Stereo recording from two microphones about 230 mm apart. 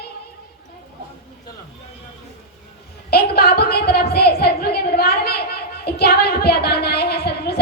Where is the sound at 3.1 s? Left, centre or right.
Left.